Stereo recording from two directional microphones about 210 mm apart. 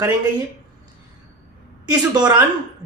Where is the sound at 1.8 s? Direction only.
20° right (ahead or behind).